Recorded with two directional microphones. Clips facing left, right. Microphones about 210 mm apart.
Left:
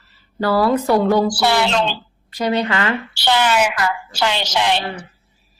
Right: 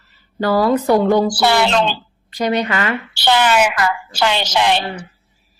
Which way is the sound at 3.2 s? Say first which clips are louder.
Right 2 dB; 60° right (ahead or behind).